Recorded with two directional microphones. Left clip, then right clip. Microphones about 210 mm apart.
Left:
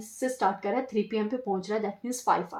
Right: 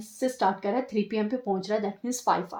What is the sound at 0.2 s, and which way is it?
Speech, 35° right (ahead or behind).